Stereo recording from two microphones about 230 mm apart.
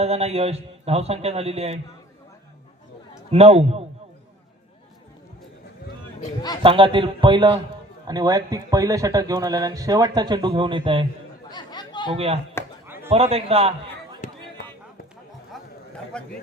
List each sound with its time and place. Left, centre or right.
0.0 s a man's voice: right
3.3 s a man's voice: right
6.6 s a man's voice: right
11.5 s chatter: centre
12.1 s a man's voice: right
14.2 s a sound: left
15.5 s chatter: centre
16.1 s a man's voice: centre